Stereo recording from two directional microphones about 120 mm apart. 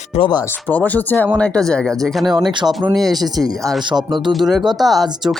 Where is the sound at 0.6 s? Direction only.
15° left (ahead or behind).